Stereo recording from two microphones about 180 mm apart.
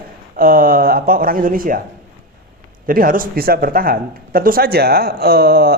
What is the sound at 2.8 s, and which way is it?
Speech, 50° right (ahead or behind).